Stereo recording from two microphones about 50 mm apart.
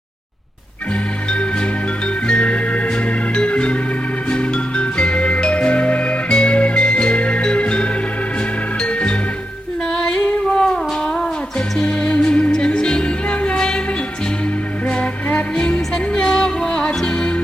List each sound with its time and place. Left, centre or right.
1.3 s music: centre
14.8 s music: left